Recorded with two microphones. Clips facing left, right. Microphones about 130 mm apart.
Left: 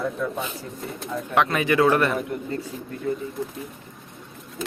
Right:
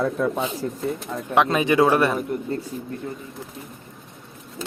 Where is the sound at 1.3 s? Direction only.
20° right (ahead or behind).